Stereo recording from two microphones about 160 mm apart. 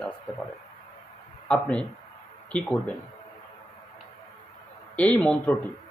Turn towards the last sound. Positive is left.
turn(degrees=10)  # may be behind; listen again after turning